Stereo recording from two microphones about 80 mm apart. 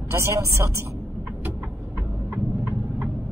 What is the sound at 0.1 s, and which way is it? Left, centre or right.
Speech, right.